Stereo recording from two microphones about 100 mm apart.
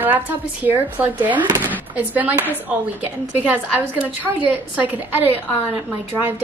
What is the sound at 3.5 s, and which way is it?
A woman's voice, 15° right (ahead or behind).